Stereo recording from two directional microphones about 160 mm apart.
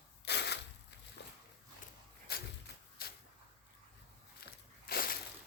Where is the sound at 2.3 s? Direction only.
75° left (ahead or behind).